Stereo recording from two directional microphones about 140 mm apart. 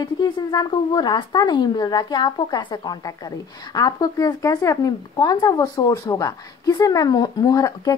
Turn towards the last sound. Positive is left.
turn(degrees=25)  # may be behind; listen again after turning